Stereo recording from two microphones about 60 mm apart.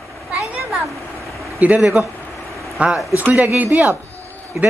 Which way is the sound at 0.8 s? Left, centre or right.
Centre.